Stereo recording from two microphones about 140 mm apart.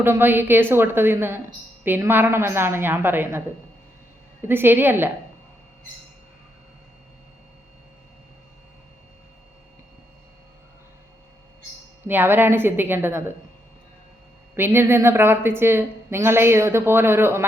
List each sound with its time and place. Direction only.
0.0 s a woman's voice: 15° right (ahead or behind)
4.4 s a woman's voice: 15° right (ahead or behind)
12.0 s a woman's voice: 15° right (ahead or behind)
14.5 s a woman's voice: 15° right (ahead or behind)